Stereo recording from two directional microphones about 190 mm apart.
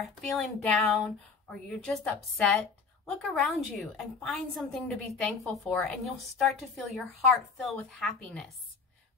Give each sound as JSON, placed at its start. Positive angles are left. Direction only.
{"t": 0.2, "sound": "a woman's voice", "side_deg": 5}